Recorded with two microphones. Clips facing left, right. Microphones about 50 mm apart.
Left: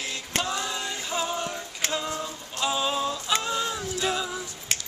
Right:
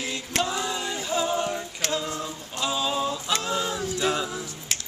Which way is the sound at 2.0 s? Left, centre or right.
Centre.